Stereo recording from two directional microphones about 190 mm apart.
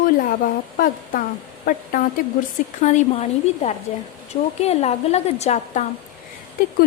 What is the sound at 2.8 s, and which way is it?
A woman's voice, 35° left (ahead or behind).